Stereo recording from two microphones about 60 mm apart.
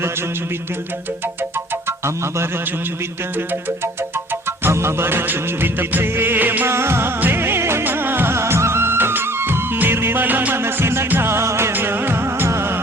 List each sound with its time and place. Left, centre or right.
4.6 s music of bollywood: right
6.7 s music: right
7.2 s music of bollywood: right
9.7 s music: right
11.7 s music: right